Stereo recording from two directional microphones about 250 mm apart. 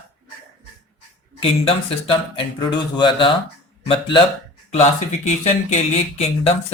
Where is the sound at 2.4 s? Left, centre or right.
Centre.